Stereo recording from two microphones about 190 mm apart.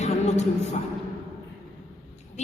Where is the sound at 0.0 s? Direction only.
35° left (ahead or behind).